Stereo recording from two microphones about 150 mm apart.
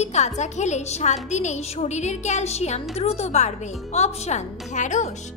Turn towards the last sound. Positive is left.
turn(degrees=50)  # may be behind; listen again after turning